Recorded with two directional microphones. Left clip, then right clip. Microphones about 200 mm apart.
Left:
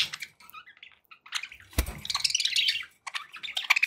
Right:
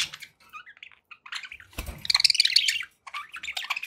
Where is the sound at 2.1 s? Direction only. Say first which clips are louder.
Right 9 dB; 30° right (ahead or behind).